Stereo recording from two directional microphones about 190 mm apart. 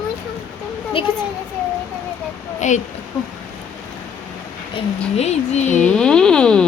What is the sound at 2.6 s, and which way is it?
Speech, 40° left (ahead or behind).